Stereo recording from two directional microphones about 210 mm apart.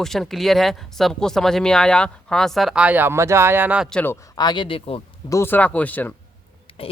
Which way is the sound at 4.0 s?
15° left (ahead or behind).